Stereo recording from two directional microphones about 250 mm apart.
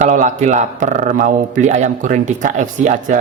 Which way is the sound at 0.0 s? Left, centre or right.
Right.